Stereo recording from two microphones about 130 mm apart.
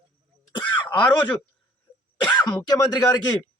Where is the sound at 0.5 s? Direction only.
35° left (ahead or behind).